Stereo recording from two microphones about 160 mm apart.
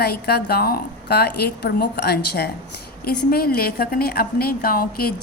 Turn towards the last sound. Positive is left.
turn(degrees=70)  # may be behind; listen again after turning